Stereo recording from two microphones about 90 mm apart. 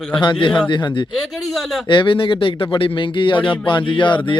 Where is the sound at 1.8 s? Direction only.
60° left (ahead or behind).